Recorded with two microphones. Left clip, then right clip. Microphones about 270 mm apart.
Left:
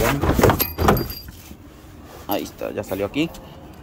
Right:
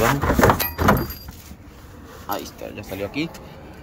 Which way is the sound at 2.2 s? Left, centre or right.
Left.